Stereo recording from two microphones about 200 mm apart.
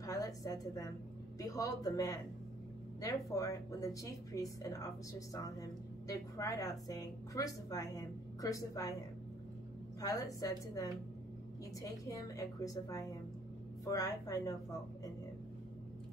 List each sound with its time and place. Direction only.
0.0 s a woman's voice: 15° left (ahead or behind)
10.0 s a woman's voice: 15° left (ahead or behind)